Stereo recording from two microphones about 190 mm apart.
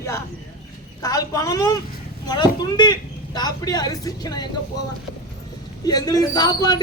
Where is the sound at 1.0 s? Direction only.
20° left (ahead or behind).